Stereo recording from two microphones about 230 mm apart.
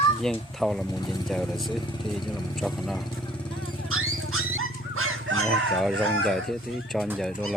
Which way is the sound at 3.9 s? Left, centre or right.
Right.